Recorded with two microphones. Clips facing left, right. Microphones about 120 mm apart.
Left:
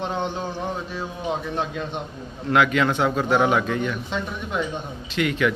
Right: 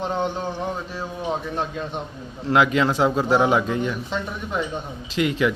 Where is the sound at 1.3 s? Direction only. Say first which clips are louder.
Even; centre (ahead or behind).